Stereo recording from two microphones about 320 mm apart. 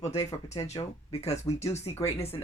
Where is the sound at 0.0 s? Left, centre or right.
Centre.